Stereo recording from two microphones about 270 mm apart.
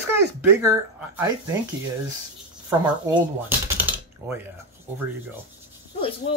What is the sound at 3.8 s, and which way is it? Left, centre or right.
Typing, centre.